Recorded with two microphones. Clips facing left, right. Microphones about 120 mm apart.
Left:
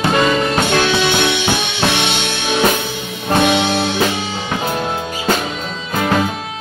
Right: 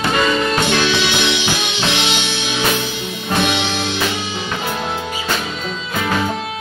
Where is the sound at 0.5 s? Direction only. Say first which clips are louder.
Left 2 dB; 50° left (ahead or behind).